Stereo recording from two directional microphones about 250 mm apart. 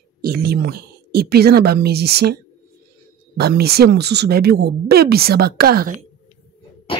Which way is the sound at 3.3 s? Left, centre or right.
Right.